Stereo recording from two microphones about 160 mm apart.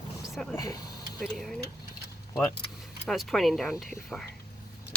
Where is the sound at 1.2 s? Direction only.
Centre (ahead or behind).